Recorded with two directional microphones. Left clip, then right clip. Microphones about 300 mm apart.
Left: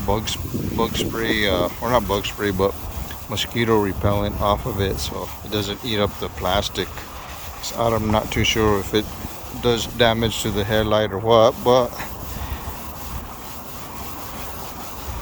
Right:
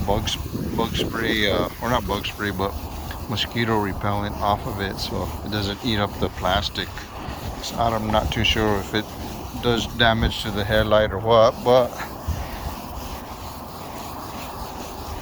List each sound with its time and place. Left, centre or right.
0.1 s speech: centre
7.8 s speech: left